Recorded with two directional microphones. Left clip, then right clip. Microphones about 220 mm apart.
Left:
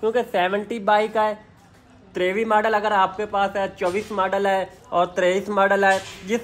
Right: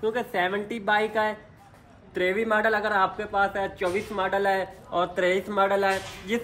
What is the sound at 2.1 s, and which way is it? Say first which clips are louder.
Speech: left 4 dB; 45° left (ahead or behind).